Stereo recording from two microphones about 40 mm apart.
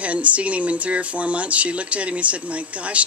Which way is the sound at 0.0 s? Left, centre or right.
Right.